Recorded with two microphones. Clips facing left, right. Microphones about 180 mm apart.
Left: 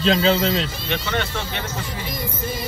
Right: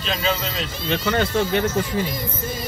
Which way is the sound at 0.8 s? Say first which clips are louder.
Right 4 dB; 35° right (ahead or behind).